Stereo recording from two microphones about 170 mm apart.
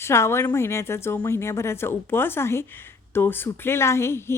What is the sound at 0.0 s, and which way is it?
A woman's voice, 15° left (ahead or behind).